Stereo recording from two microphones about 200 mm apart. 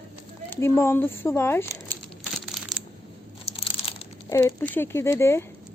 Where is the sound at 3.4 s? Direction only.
25° left (ahead or behind).